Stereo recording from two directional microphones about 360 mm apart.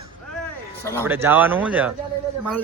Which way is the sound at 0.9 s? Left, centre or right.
Centre.